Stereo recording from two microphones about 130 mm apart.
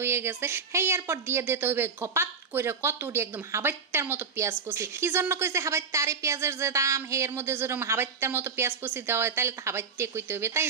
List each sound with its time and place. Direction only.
0.0 s a woman's voice: 20° right (ahead or behind)